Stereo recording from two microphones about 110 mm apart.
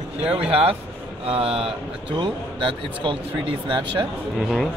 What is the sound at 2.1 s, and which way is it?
Speech, 45° right (ahead or behind).